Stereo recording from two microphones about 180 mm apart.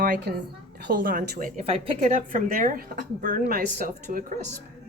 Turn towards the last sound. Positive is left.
turn(degrees=-50)  # may be behind; listen again after turning